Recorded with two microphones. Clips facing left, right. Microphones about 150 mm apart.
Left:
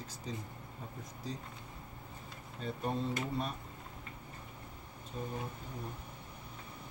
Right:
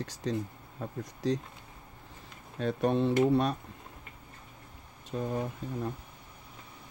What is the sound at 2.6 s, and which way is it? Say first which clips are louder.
Speech: right 9 dB; 75° right (ahead or behind).